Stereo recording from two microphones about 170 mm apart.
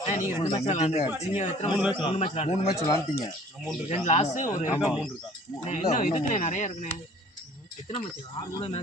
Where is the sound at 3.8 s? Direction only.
40° left (ahead or behind).